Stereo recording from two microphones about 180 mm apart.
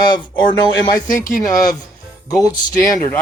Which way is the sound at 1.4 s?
20° left (ahead or behind).